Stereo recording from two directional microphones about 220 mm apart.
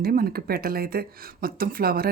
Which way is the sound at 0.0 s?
40° right (ahead or behind).